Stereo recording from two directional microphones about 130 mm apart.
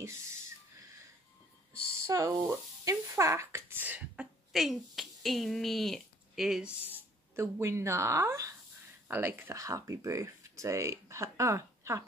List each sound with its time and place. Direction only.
2.0 s speech: 20° right (ahead or behind)
4.5 s speech: centre (ahead or behind)
7.3 s speech: 20° right (ahead or behind)